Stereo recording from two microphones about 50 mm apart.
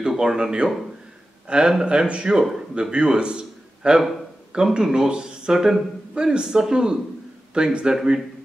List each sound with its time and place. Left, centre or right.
0.1 s speech: centre
2.7 s a man's voice: centre